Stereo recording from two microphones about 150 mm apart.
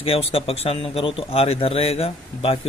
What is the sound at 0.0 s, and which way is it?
A man's voice, 40° left (ahead or behind).